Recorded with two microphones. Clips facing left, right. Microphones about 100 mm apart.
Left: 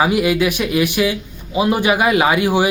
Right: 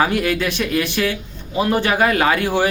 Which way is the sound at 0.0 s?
10° left (ahead or behind).